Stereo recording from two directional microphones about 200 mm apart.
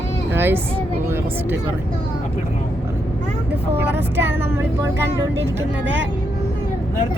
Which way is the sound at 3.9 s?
10° right (ahead or behind).